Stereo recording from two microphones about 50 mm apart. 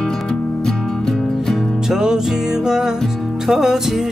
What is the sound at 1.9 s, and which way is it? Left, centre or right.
Music, centre.